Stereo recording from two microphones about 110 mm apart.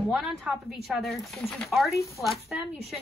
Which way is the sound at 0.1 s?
Centre (ahead or behind).